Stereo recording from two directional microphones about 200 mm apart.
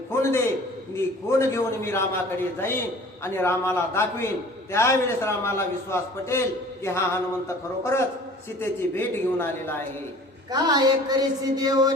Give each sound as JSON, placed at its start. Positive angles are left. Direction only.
{"t": 0.1, "sound": "a man's voice", "side_deg": 15}
{"t": 10.5, "sound": "speech", "side_deg": -20}